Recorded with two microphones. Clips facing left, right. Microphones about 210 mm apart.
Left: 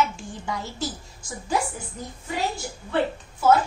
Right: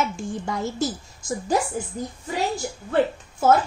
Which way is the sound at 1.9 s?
35° right (ahead or behind).